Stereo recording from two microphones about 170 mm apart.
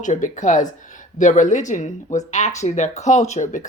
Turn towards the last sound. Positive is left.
turn(degrees=45)  # may be behind; listen again after turning